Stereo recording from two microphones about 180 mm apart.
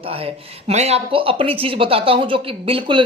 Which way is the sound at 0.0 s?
30° right (ahead or behind).